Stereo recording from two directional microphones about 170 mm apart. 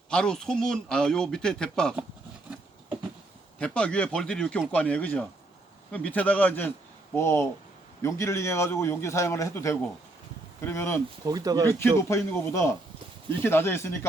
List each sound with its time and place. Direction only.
0.1 s speech: 5° left (ahead or behind)
3.6 s a man's voice: 5° left (ahead or behind)
11.3 s speech: 20° right (ahead or behind)
11.8 s a man's voice: 15° left (ahead or behind)